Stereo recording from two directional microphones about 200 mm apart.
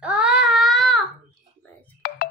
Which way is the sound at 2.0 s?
50° left (ahead or behind).